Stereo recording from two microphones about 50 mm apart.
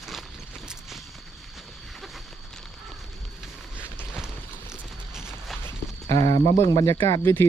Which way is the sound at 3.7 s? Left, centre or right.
Left.